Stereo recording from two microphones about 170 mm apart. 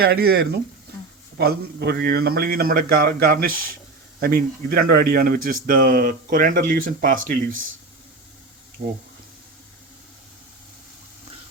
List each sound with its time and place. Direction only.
0.0 s speech: 65° right (ahead or behind)
8.8 s speech: 55° right (ahead or behind)